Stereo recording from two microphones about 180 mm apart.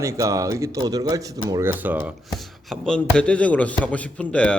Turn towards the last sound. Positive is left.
turn(degrees=5)  # may be behind; listen again after turning